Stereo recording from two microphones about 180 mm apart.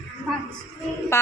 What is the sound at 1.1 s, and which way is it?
Music, 15° left (ahead or behind).